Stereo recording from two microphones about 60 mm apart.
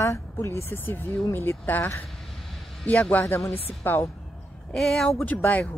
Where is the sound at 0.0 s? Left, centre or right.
Left.